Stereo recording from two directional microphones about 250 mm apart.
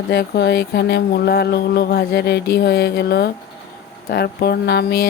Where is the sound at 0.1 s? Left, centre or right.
Left.